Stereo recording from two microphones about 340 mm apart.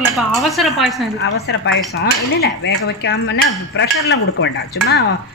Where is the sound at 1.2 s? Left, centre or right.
Left.